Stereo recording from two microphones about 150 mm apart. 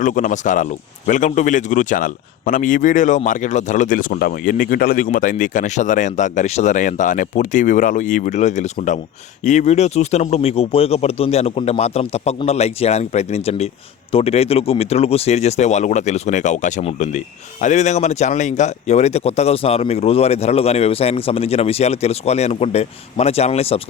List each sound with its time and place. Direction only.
0.0 s speech: 60° left (ahead or behind); by 23.8 s 40° left (ahead or behind)